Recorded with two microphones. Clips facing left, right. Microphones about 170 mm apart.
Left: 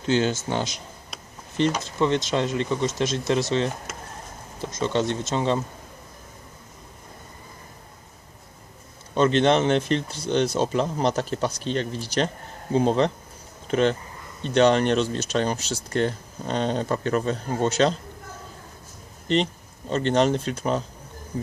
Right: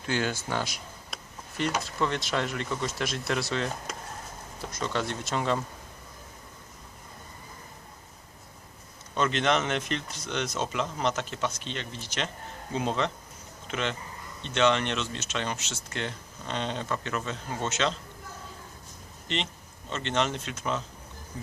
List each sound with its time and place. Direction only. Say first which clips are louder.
0.0 s speech: left 7 dB; 25° left (ahead or behind)
1.8 s speech: left 7 dB; 20° left (ahead or behind)
9.1 s speech: left 7 dB; 30° left (ahead or behind)
19.3 s speech: left 10 dB; 35° left (ahead or behind)